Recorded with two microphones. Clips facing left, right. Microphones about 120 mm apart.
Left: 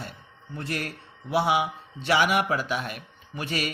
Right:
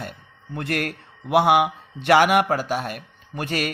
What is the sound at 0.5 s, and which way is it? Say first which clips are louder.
A man's voice: right 6 dB; 60° right (ahead or behind).